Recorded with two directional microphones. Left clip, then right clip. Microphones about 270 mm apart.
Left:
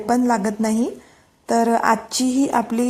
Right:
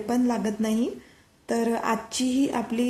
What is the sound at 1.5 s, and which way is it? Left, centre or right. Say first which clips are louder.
A woman's voice: left 9 dB; centre.